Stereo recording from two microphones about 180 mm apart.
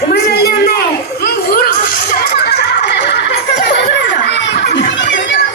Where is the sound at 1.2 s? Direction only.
60° left (ahead or behind); by 5.0 s 80° left.